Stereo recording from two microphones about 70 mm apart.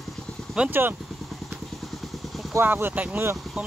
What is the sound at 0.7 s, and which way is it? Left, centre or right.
Speech, right.